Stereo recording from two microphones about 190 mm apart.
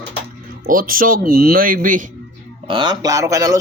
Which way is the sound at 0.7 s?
45° right (ahead or behind).